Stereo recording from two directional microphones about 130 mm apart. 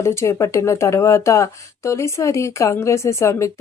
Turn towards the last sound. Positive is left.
turn(degrees=20)  # may be behind; listen again after turning